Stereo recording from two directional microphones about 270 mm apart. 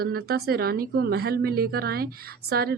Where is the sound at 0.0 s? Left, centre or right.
Right.